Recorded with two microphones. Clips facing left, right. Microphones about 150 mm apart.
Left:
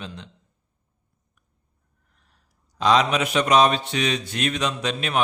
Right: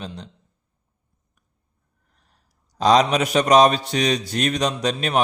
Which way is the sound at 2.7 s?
40° right (ahead or behind).